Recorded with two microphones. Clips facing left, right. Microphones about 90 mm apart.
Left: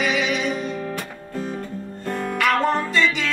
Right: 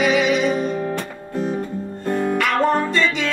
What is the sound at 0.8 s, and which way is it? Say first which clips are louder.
Music: right 4 dB; 20° right (ahead or behind).